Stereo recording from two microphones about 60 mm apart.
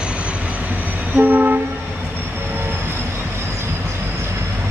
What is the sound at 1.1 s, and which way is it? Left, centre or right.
Train, right.